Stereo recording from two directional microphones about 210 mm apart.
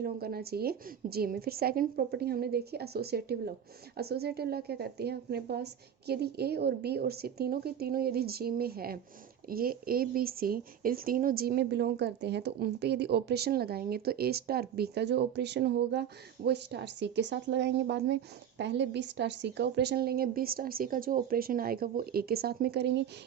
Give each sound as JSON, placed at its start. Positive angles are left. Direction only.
{"t": 0.0, "sound": "speech", "side_deg": -45}